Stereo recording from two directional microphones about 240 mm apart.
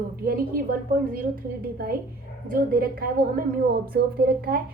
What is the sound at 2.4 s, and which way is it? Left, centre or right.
A woman's voice, right.